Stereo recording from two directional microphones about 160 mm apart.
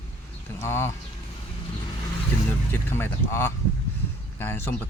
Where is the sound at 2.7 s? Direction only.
15° left (ahead or behind).